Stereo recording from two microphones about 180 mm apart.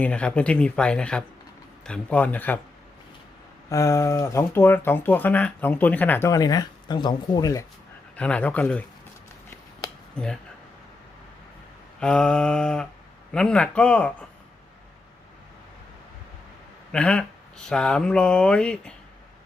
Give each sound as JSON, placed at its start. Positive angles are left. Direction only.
{"t": 0.0, "sound": "speech", "side_deg": 5}
{"t": 3.7, "sound": "speech", "side_deg": 15}
{"t": 8.1, "sound": "speech", "side_deg": 5}
{"t": 11.9, "sound": "speech", "side_deg": 5}
{"t": 16.9, "sound": "speech", "side_deg": 5}